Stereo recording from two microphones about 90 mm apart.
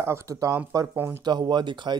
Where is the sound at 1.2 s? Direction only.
55° right (ahead or behind).